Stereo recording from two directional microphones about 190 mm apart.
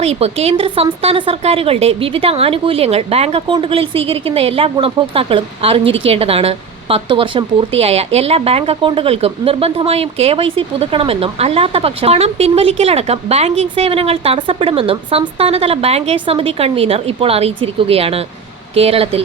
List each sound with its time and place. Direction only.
0.0 s a woman's voice: 35° right (ahead or behind)